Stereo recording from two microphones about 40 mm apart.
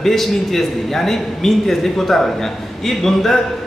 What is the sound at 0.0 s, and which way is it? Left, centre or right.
A man's voice, centre.